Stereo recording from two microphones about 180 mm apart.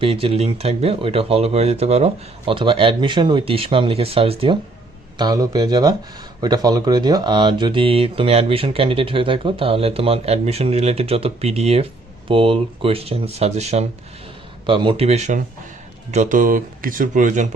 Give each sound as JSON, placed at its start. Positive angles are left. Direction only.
{"t": 0.0, "sound": "speech", "side_deg": -30}